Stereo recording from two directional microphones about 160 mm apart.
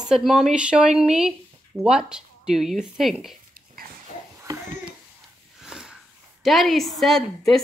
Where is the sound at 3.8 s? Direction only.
65° right (ahead or behind).